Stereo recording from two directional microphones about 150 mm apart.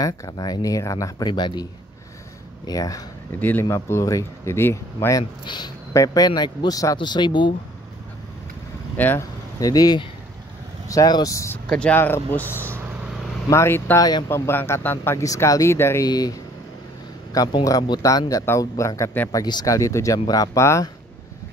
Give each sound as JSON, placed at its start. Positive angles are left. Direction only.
{"t": 0.0, "sound": "speech", "side_deg": 25}
{"t": 3.3, "sound": "speech", "side_deg": 10}
{"t": 5.4, "sound": "speech", "side_deg": 30}
{"t": 8.9, "sound": "speech", "side_deg": 15}
{"t": 9.6, "sound": "speech", "side_deg": 25}
{"t": 11.7, "sound": "speech", "side_deg": 10}
{"t": 13.5, "sound": "speech", "side_deg": 15}